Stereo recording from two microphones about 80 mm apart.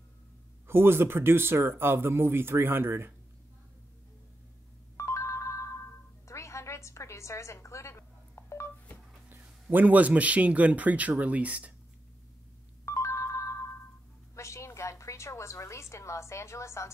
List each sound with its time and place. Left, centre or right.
0.7 s speech: right
4.9 s music: left
9.3 s speech: right
12.8 s ringtone: left
14.3 s a sound: left